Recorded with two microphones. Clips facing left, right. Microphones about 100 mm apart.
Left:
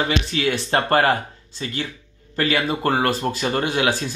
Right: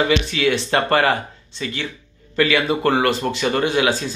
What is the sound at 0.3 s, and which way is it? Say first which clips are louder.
Speech: right 2 dB; 35° left (ahead or behind).